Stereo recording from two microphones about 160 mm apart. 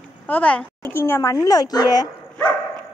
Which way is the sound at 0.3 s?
10° left (ahead or behind).